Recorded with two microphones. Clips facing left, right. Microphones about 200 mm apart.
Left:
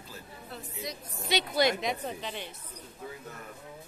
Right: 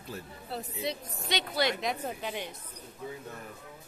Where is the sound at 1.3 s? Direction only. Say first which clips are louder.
Left 3 dB; 10° left (ahead or behind).